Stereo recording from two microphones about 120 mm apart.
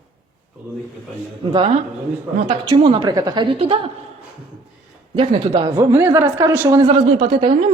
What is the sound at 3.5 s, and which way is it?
Speech, 50° right (ahead or behind).